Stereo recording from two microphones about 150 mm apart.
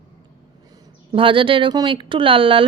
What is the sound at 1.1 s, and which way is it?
A woman's voice, 35° right (ahead or behind).